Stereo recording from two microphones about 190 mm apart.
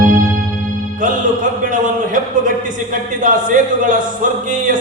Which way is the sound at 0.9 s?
45° right (ahead or behind).